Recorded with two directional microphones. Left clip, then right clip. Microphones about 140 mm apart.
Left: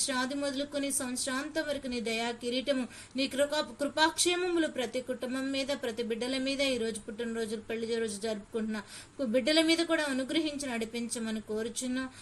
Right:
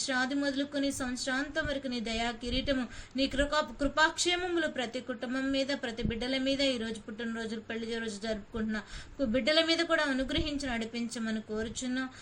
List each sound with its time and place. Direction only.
0.1 s a woman's voice: 45° left (ahead or behind)